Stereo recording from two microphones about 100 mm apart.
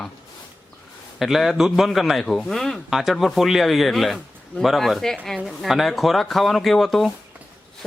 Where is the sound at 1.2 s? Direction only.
Centre (ahead or behind).